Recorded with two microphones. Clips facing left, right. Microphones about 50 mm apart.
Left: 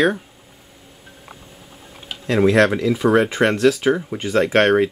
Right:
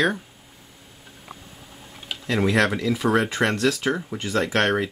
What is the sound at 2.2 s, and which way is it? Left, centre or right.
Speech, centre.